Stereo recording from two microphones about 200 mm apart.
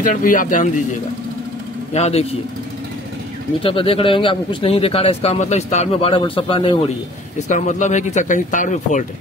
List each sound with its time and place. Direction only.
0.0 s speech: 40° left (ahead or behind)
2.0 s speech: 35° left (ahead or behind)
3.6 s speech: 25° left (ahead or behind)
7.3 s speech: 35° left (ahead or behind)